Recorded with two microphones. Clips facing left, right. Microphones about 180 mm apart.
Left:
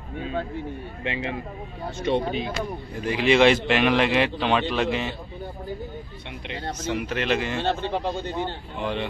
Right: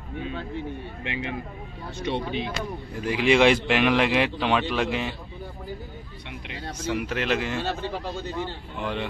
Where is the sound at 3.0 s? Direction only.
10° right (ahead or behind).